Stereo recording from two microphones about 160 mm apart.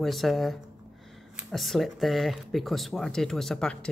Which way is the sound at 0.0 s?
Centre (ahead or behind).